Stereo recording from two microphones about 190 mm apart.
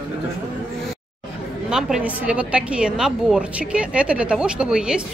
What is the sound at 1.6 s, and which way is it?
A woman's voice, 5° right (ahead or behind).